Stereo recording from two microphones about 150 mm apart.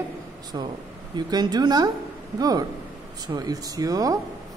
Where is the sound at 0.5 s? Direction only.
25° right (ahead or behind).